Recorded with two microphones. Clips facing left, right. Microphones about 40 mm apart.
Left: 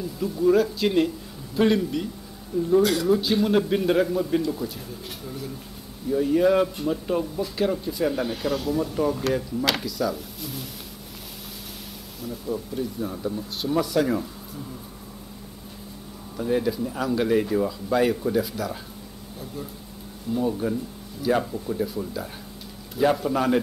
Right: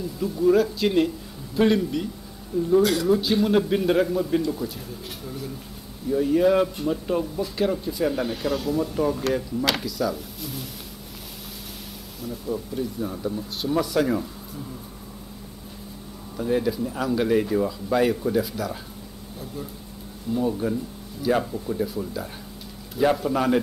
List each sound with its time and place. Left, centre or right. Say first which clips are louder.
0.0 s speech: right 1 dB; centre
12.2 s speech: even; centre
16.3 s speech: even; centre
20.3 s speech: right 1 dB; centre